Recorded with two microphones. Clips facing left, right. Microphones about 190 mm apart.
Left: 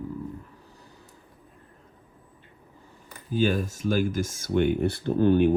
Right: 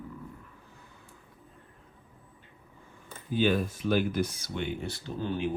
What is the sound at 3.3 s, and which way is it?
Speech, 45° left (ahead or behind).